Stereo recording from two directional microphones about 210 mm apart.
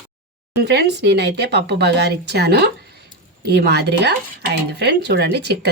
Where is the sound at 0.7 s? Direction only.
50° right (ahead or behind).